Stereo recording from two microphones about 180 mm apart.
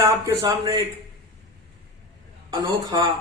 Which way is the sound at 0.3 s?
20° right (ahead or behind).